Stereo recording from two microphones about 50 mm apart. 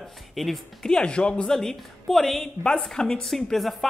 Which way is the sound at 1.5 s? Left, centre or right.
Centre.